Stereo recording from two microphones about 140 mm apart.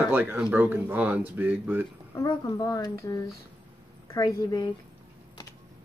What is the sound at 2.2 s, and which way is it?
Speech, 30° left (ahead or behind).